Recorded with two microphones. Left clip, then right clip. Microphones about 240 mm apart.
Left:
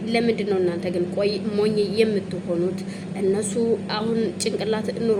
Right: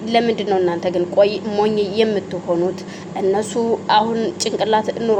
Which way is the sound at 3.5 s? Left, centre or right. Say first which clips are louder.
Right 8 dB; centre.